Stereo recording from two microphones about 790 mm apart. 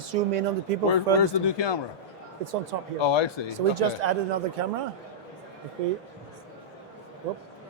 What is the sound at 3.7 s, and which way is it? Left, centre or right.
Speech, right.